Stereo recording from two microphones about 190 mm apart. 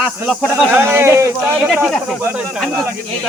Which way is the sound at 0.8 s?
10° right (ahead or behind).